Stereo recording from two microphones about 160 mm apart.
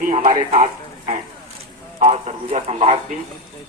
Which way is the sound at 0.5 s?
45° right (ahead or behind).